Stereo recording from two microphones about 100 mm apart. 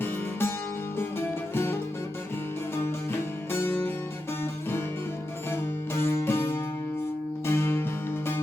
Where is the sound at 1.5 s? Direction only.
25° left (ahead or behind).